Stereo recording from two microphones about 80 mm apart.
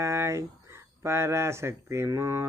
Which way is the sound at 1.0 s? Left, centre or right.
Right.